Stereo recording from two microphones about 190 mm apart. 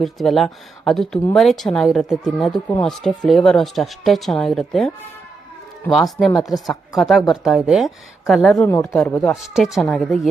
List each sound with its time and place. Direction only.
0.0 s speech: centre (ahead or behind)
5.9 s speech: centre (ahead or behind)
8.7 s speech: 15° left (ahead or behind)